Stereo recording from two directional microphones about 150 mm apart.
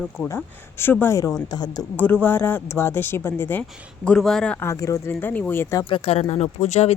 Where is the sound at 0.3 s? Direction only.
15° left (ahead or behind).